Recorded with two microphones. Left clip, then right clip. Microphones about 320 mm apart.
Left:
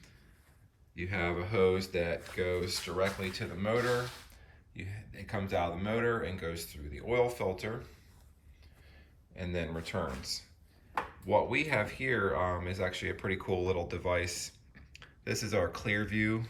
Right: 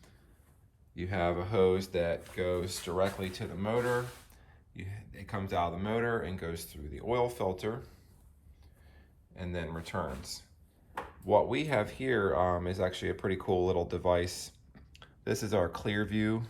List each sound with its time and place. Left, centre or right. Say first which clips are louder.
1.1 s speech: right 2 dB; centre
9.0 s speech: left 2 dB; centre
10.3 s speech: left 5 dB; right
11.3 s speech: right 2 dB; centre